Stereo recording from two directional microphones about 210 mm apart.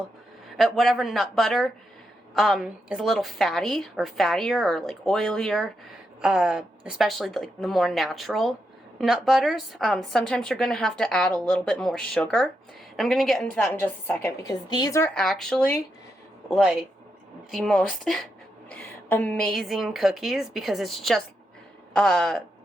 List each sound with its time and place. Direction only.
0.5 s a woman's voice: centre (ahead or behind)
15.1 s a woman's voice: centre (ahead or behind)